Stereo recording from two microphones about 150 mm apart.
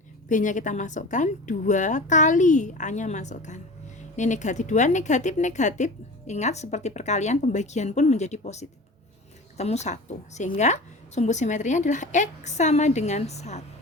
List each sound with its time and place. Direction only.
0.3 s a woman's voice: 55° left (ahead or behind)